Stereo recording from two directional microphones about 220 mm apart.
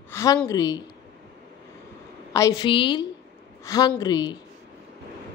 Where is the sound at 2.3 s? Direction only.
15° left (ahead or behind).